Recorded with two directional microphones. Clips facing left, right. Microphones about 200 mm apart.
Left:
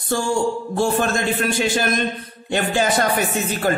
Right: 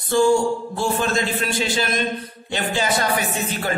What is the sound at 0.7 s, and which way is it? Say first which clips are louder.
Speech: left 3 dB; 50° left (ahead or behind).